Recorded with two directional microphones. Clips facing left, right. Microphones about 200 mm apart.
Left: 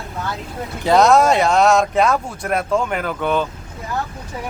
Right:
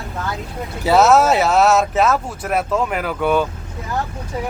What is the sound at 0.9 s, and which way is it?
Speech, 5° right (ahead or behind).